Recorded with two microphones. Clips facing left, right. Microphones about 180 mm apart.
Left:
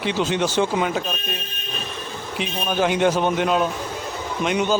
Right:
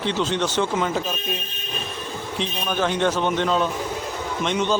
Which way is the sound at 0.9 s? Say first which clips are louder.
Even; 5° right (ahead or behind).